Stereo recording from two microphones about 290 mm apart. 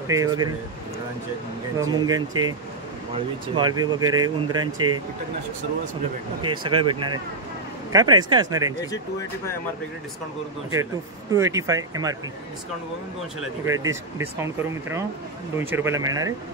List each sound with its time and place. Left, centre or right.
0.1 s speech: centre
1.8 s speech: centre
3.5 s speech: centre
6.4 s speech: centre
10.7 s speech: centre
13.4 s speech: centre